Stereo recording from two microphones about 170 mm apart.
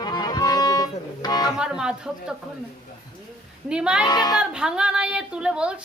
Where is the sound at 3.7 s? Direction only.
5° right (ahead or behind).